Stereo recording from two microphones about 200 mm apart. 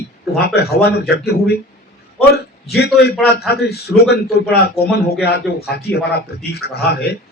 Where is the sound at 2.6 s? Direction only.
55° left (ahead or behind).